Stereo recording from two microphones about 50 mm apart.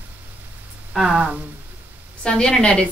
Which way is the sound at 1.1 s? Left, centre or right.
Right.